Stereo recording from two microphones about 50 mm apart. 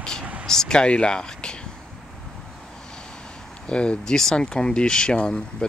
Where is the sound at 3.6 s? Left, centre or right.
Left.